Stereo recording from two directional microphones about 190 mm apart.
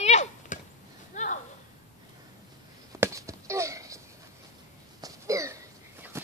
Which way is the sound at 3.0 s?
15° right (ahead or behind).